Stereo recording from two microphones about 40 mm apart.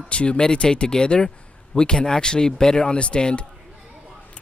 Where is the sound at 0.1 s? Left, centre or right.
Left.